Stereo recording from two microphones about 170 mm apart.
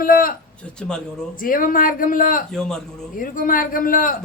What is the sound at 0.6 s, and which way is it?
Speech, 5° left (ahead or behind).